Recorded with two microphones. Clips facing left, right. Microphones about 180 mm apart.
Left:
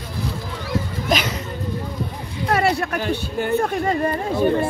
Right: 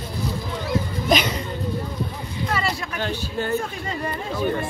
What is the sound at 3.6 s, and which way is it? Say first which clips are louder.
Speech: left 8 dB; 55° left (ahead or behind).